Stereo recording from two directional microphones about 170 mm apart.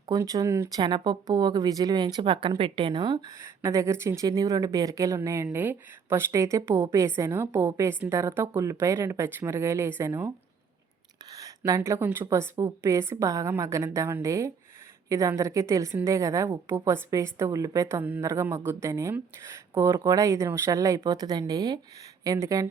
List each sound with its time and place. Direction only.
0.1 s speech: 20° right (ahead or behind)
11.3 s speech: 20° right (ahead or behind)